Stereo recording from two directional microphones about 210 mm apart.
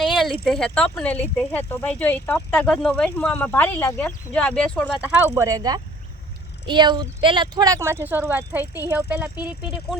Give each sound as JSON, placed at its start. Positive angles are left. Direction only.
{"t": 0.0, "sound": "a sound", "side_deg": 0}
{"t": 0.4, "sound": "speech", "side_deg": 5}
{"t": 5.2, "sound": "speech", "side_deg": -15}